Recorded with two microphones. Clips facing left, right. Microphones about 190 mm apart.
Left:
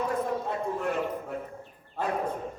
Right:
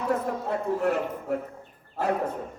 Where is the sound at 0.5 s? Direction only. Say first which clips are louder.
Right 4 dB; 65° right (ahead or behind).